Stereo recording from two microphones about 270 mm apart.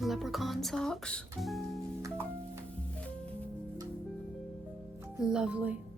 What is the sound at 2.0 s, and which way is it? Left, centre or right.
Music, centre.